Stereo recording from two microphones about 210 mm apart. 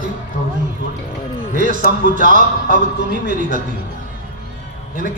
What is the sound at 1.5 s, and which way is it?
Speech, 40° right (ahead or behind).